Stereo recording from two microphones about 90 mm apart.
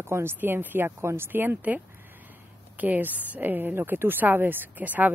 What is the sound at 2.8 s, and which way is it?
Speech, 20° right (ahead or behind).